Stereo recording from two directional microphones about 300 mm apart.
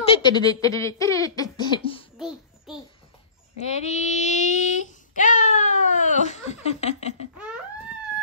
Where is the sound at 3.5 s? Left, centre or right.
Left.